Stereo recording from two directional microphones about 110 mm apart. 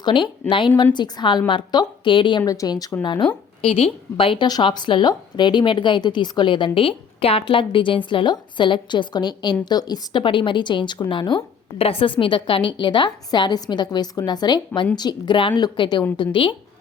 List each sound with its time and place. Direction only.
0.0 s a woman's voice: 45° left (ahead or behind)
2.5 s a woman's voice: 35° left (ahead or behind)
3.0 s a woman's voice: 45° left (ahead or behind)
3.6 s a woman's voice: 60° left (ahead or behind)
4.4 s a woman's voice: 40° left (ahead or behind)
11.8 s a woman's voice: 60° left (ahead or behind)